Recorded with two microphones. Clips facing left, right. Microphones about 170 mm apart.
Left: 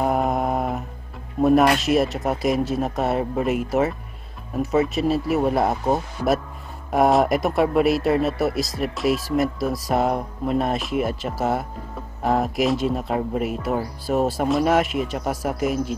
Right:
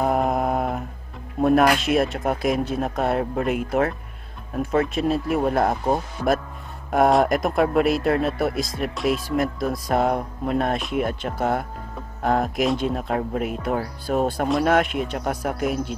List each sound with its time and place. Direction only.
0.0 s mantra: centre (ahead or behind)
1.4 s speech: centre (ahead or behind)